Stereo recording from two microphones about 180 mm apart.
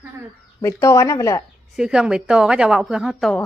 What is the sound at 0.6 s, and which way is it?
Speech, 15° left (ahead or behind).